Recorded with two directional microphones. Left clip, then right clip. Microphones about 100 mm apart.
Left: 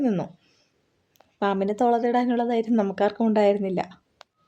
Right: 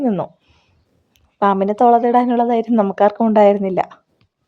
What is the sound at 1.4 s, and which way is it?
A woman's voice, 40° right (ahead or behind).